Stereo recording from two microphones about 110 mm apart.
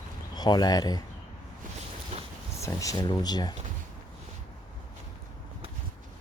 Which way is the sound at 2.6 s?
30° left (ahead or behind).